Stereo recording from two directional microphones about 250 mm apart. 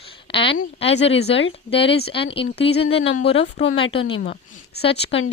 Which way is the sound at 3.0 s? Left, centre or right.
Left.